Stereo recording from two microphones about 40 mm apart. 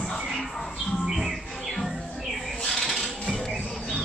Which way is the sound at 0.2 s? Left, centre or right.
Centre.